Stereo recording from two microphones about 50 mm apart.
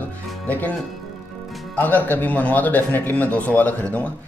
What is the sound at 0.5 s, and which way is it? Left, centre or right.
Speech, left.